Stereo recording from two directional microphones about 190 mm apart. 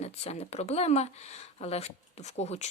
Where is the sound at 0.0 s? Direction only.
35° left (ahead or behind).